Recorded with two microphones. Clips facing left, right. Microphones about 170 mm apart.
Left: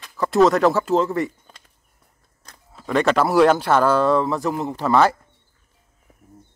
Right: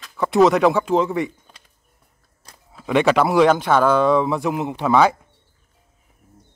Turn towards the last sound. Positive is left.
turn(degrees=0)  # may be behind; listen again after turning